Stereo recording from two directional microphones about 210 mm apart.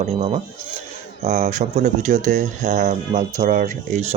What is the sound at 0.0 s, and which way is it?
Speech, 30° right (ahead or behind).